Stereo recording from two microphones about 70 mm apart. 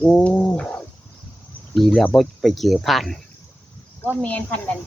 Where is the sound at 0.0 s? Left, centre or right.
Centre.